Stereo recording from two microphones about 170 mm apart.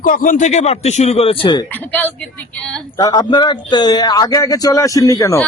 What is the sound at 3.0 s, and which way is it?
A man's voice, 25° left (ahead or behind).